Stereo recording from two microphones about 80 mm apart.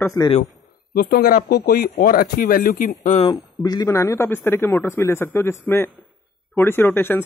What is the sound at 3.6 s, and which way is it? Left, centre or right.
Speech, left.